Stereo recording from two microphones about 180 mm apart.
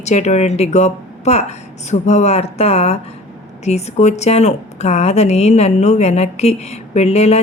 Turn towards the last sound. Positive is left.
turn(degrees=35)  # may be behind; listen again after turning